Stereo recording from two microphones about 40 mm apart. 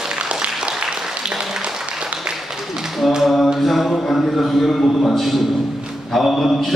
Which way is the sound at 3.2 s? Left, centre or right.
Centre.